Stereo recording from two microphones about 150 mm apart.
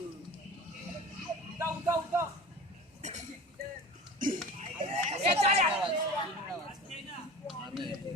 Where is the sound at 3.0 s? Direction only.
50° right (ahead or behind).